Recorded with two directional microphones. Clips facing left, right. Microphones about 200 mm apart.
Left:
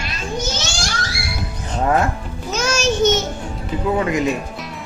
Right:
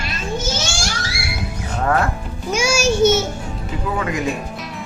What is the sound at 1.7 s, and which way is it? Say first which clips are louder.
Music: left 1 dB; 20° left (ahead or behind).